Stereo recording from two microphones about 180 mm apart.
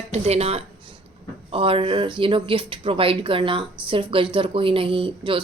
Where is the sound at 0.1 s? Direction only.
35° right (ahead or behind).